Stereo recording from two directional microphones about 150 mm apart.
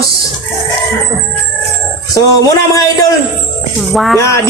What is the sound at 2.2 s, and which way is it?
Speech, 25° left (ahead or behind).